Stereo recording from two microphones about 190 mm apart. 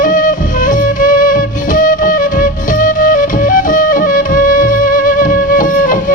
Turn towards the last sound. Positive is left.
turn(degrees=45)  # may be behind; listen again after turning